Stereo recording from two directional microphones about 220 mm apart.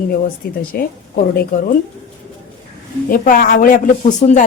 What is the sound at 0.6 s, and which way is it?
Speech, 40° left (ahead or behind).